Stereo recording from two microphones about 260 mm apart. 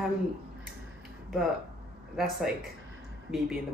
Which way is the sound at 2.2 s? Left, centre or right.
Centre.